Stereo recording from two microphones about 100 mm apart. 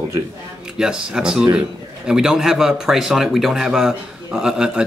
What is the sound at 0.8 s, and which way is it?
Speech, 5° right (ahead or behind).